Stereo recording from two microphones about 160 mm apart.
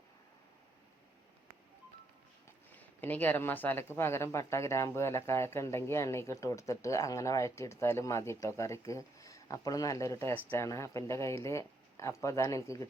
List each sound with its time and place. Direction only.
2.7 s speech: 10° left (ahead or behind)